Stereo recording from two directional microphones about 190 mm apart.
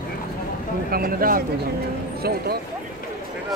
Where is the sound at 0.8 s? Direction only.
50° right (ahead or behind).